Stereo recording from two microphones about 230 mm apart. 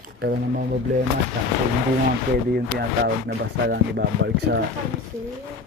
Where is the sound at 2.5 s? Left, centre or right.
Right.